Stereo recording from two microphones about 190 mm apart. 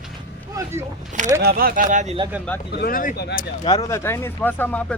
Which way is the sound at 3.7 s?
20° left (ahead or behind).